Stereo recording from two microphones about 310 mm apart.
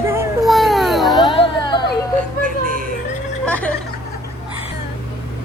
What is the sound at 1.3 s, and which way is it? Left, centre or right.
Children playing, centre.